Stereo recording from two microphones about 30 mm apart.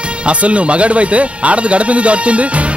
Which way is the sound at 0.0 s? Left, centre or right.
Right.